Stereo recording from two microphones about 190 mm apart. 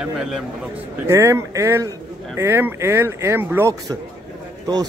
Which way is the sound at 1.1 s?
15° right (ahead or behind).